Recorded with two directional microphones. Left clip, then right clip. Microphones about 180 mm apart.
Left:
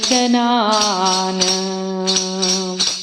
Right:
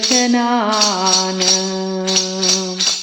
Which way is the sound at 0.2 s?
35° left (ahead or behind).